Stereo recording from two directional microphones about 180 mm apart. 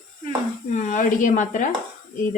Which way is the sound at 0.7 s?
45° left (ahead or behind).